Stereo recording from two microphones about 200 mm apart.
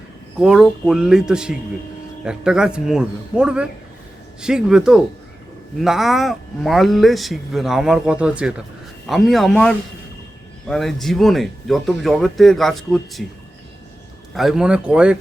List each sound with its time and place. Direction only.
0.3 s speech: centre (ahead or behind)
14.3 s speech: centre (ahead or behind)